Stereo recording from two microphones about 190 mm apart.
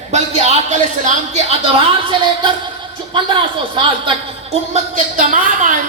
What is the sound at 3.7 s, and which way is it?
Speech, 25° right (ahead or behind).